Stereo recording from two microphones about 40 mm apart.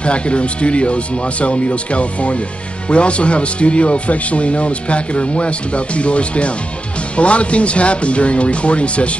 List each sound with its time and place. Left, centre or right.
0.0 s speech: left